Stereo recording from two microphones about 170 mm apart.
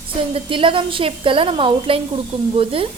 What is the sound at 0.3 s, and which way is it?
A woman's voice, 30° right (ahead or behind).